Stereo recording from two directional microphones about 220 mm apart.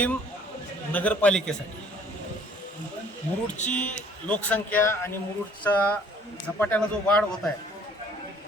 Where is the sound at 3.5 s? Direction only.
35° left (ahead or behind).